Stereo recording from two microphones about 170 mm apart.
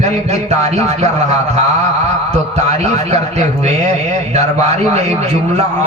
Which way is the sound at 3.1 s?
40° right (ahead or behind).